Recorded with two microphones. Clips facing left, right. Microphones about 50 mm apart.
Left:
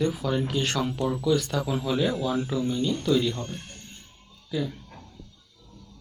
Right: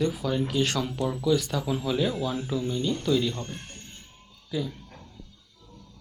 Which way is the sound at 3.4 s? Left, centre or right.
Centre.